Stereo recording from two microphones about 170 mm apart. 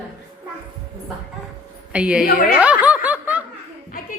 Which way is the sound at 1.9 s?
5° right (ahead or behind).